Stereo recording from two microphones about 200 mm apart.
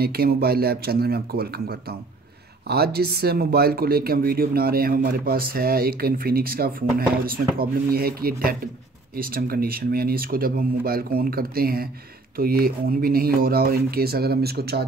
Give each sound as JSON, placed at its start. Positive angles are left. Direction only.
{"t": 0.0, "sound": "speech", "side_deg": -50}